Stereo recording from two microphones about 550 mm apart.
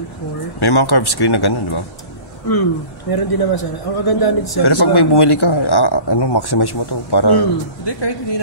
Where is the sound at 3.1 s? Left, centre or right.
Left.